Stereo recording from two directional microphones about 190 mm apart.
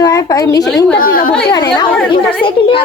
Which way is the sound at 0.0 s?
20° left (ahead or behind).